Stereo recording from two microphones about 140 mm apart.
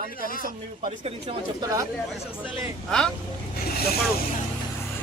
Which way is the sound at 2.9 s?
5° left (ahead or behind).